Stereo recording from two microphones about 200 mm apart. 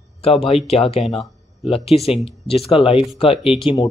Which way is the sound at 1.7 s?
30° left (ahead or behind).